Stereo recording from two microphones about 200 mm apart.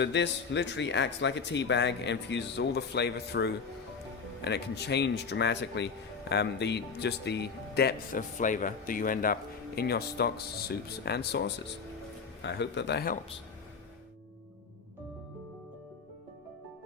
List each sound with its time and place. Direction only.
0.0 s speech: 60° left (ahead or behind)